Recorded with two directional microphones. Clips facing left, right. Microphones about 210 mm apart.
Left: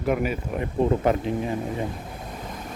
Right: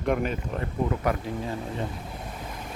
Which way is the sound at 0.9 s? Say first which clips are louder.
Left 6 dB; 25° left (ahead or behind).